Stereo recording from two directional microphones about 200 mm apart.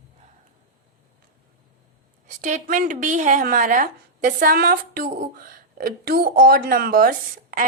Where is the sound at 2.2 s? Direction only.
40° right (ahead or behind).